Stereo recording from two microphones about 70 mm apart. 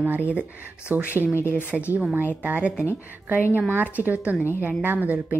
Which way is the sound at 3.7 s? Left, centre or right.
Right.